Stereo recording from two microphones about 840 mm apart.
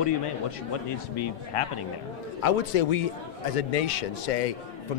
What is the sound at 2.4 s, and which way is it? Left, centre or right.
A man's voice, left.